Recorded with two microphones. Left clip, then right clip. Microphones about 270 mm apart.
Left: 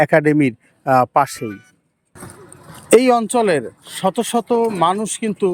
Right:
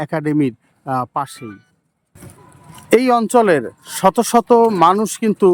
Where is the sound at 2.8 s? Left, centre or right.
Centre.